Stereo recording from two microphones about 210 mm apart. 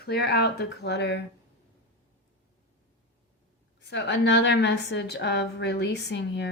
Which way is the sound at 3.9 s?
55° left (ahead or behind).